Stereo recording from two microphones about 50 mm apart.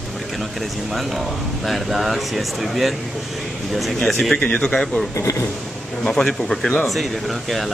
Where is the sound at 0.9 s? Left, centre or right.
Centre.